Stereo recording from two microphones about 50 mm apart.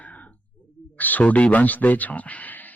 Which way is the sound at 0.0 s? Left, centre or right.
Left.